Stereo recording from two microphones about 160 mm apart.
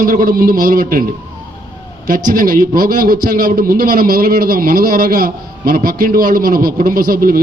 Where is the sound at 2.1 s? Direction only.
60° right (ahead or behind).